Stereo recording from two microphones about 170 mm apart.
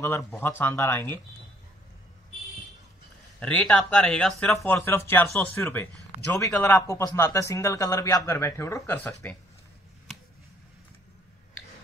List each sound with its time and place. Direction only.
0.3 s a man's voice: 10° left (ahead or behind)
3.3 s speech: 5° left (ahead or behind)
4.6 s a man's voice: 15° left (ahead or behind)